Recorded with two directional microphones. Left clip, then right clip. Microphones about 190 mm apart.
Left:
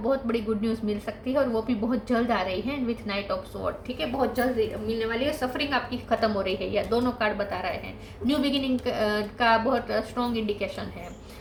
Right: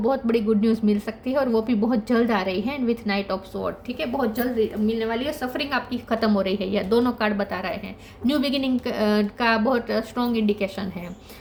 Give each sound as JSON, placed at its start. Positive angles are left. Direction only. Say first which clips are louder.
{"t": 0.0, "sound": "a woman's voice", "louder": "right 4 dB", "side_deg": -55}